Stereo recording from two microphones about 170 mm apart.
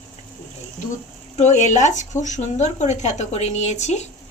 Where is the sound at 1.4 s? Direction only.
45° left (ahead or behind).